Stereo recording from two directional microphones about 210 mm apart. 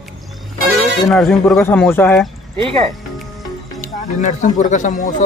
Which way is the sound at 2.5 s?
25° right (ahead or behind).